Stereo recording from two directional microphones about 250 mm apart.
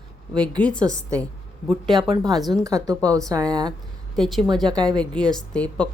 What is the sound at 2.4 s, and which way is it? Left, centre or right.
Speech, centre.